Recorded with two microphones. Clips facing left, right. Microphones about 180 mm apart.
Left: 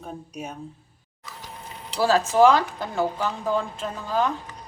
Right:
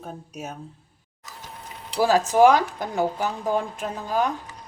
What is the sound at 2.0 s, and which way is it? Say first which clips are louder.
A woman's voice: right 1 dB; 15° right (ahead or behind).